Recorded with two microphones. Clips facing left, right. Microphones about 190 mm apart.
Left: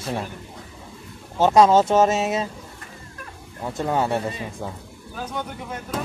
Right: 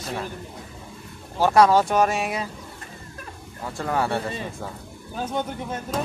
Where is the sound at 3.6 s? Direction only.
20° left (ahead or behind).